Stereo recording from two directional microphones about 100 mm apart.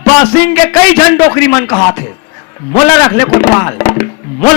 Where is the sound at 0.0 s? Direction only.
20° left (ahead or behind).